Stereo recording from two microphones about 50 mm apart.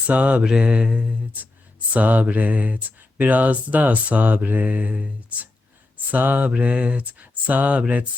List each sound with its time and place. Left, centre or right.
0.1 s speech: right
0.4 s speech: centre
6.1 s speech: right
6.5 s speech: right